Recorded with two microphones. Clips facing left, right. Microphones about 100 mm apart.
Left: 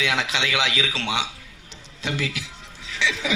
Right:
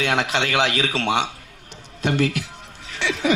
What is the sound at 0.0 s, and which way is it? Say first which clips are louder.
A man's voice: right 3 dB; 50° right (ahead or behind).